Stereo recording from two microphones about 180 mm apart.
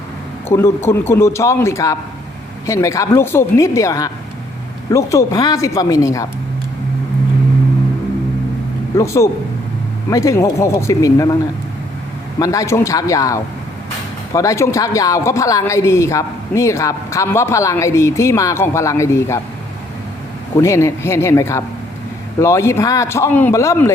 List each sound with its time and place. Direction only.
0.4 s a woman's voice: 15° left (ahead or behind)
9.0 s a woman's voice: 15° left (ahead or behind)
12.4 s a woman's voice: 20° left (ahead or behind)
20.6 s a woman's voice: 15° left (ahead or behind)